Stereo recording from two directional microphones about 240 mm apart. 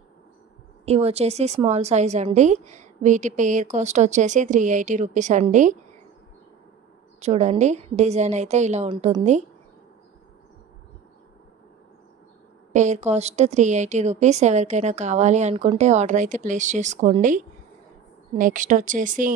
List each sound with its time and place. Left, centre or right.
0.8 s a woman's voice: right
7.2 s a woman's voice: right
12.7 s a woman's voice: right